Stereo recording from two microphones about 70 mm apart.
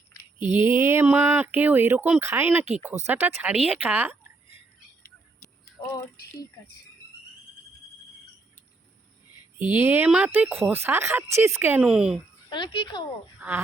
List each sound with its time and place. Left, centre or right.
0.5 s speech: right
1.0 s speech: right
3.5 s speech: centre; by 4.2 s right
9.6 s speech: right
11.8 s speech: centre
12.5 s speech: left